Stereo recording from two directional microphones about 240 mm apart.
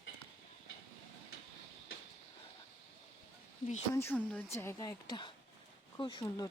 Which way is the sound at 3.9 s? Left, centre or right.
Centre.